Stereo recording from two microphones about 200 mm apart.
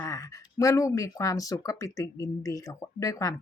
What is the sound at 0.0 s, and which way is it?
Speech, 15° left (ahead or behind).